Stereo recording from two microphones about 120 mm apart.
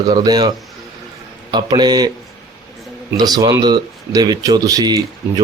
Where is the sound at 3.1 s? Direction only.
35° right (ahead or behind).